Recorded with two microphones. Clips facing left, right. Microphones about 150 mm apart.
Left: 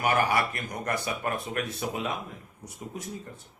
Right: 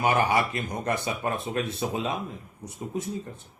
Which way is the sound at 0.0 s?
20° right (ahead or behind).